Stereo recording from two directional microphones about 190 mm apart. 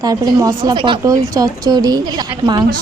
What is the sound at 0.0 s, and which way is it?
Speech, 20° right (ahead or behind).